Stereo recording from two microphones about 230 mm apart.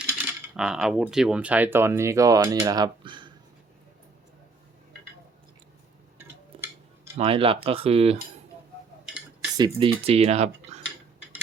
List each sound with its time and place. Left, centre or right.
0.5 s speech: centre; by 3.3 s right
6.1 s tick-tock: centre
7.2 s speech: right
9.0 s a sound: centre
9.6 s speech: right